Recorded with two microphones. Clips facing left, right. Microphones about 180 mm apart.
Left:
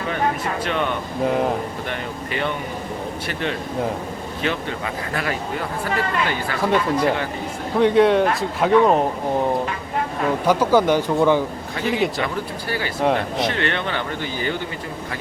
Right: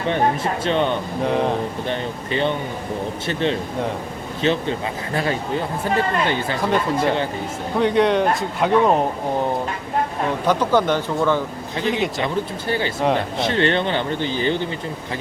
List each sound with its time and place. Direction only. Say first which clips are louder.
0.1 s speech: right 4 dB; 25° right (ahead or behind)
1.2 s speech: left 1 dB; 5° left (ahead or behind)
1.9 s speech: right 3 dB; 25° right (ahead or behind)
7.8 s speech: left 2 dB; centre (ahead or behind)
10.4 s speech: left 2 dB; 10° left (ahead or behind)
11.9 s speech: left 1 dB; centre (ahead or behind)
12.2 s speech: right 2 dB; 25° right (ahead or behind)